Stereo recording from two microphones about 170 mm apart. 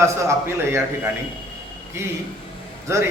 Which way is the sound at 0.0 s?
15° right (ahead or behind).